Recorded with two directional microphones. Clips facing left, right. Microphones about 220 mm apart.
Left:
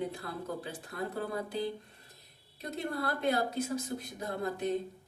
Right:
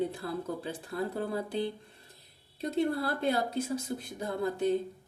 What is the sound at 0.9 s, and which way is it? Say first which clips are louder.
Speech: right 3 dB; 30° right (ahead or behind).